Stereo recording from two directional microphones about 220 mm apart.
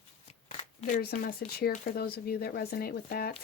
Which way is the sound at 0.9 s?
40° left (ahead or behind).